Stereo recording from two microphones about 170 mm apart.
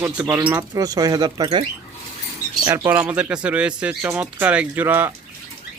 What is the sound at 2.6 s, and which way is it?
Speech, 15° right (ahead or behind).